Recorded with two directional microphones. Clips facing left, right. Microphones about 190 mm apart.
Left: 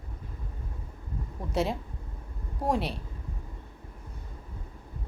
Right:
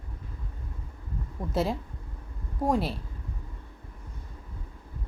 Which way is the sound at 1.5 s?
Centre (ahead or behind).